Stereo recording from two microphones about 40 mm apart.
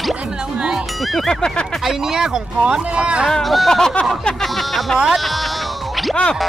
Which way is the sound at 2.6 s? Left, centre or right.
Right.